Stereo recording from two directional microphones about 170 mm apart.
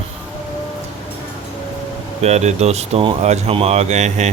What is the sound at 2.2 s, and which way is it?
Speech, 40° right (ahead or behind).